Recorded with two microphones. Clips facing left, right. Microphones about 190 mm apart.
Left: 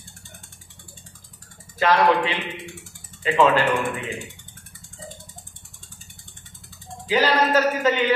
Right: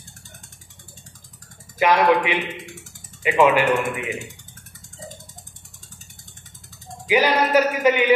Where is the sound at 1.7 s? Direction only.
15° right (ahead or behind).